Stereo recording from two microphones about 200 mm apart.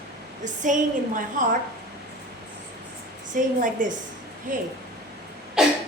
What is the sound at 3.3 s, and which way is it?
Speech, 40° right (ahead or behind).